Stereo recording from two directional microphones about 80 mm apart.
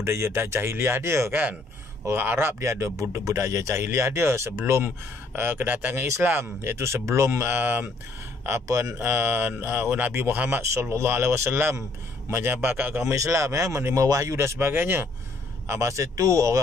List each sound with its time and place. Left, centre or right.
0.0 s speech: right
1.3 s speech: right
2.0 s speech: right
9.1 s speech: right
10.6 s speech: right
13.1 s speech: right